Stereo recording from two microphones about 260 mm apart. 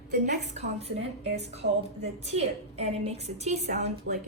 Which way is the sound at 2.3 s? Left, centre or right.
Right.